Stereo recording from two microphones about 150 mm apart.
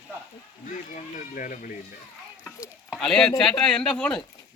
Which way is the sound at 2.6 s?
Centre (ahead or behind).